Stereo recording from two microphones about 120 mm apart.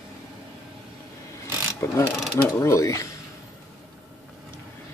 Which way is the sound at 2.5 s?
25° left (ahead or behind).